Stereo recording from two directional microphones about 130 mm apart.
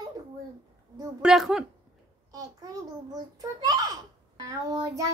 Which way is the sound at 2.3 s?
30° right (ahead or behind).